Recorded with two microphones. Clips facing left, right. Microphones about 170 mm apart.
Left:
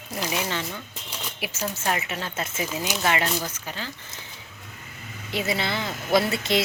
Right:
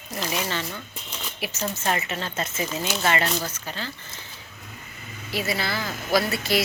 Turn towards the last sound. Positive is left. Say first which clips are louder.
# left 1 dB
turn(degrees=25)  # may be behind; listen again after turning